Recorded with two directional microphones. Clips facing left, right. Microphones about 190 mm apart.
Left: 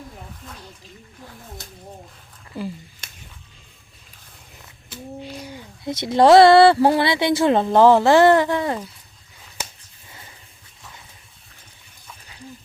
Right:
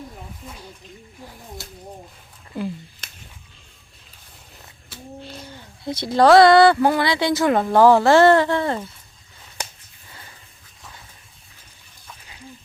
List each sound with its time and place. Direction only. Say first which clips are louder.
4.9 s a sound: left 3 dB; 10° left (ahead or behind)
5.9 s speech: left 1 dB; 25° left (ahead or behind)
10.1 s vehicle: even; 20° left (ahead or behind)